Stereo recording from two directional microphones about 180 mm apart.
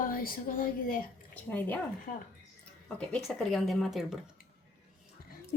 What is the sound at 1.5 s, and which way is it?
Speech, 10° left (ahead or behind).